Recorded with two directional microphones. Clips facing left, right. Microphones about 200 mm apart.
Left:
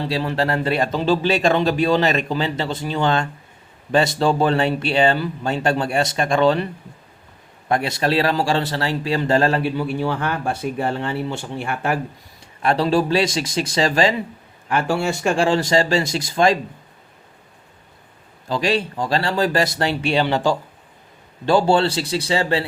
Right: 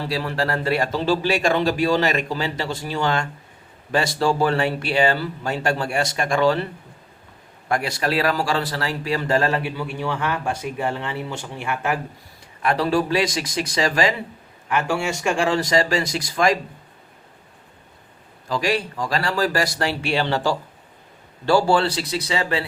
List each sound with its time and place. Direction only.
0.0 s a man's voice: 20° left (ahead or behind)
7.7 s a man's voice: 25° left (ahead or behind)
18.4 s a man's voice: 25° left (ahead or behind)